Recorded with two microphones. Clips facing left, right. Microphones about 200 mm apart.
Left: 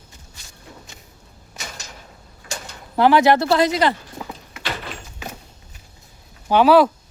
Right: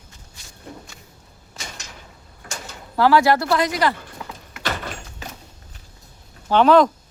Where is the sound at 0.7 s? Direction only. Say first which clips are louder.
Right 5 dB; 55° right (ahead or behind).